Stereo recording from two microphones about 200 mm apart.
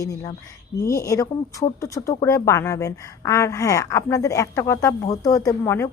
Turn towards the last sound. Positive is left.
turn(degrees=15)  # may be behind; listen again after turning